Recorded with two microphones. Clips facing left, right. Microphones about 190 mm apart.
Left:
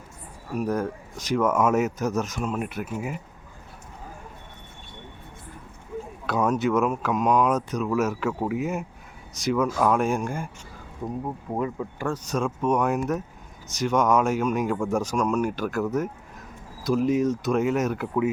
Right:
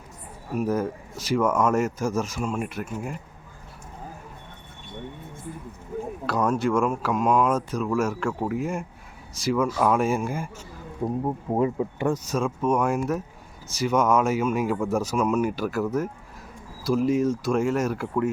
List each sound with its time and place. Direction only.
0.5 s speech: 5° right (ahead or behind)
6.2 s speech: centre (ahead or behind)
11.0 s speech: 25° right (ahead or behind)
12.1 s speech: 5° right (ahead or behind)